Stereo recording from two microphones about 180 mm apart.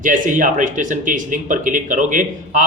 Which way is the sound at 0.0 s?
45° right (ahead or behind).